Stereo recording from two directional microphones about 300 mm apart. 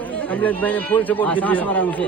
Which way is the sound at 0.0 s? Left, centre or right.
Centre.